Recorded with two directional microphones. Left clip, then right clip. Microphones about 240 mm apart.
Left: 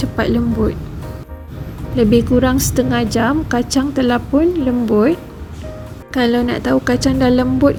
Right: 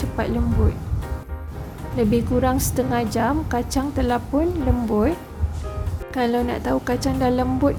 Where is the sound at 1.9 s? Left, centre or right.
Centre.